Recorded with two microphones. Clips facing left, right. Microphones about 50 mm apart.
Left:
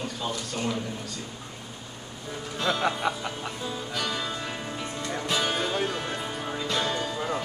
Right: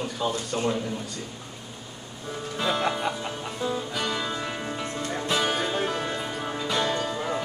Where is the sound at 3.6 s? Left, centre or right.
Centre.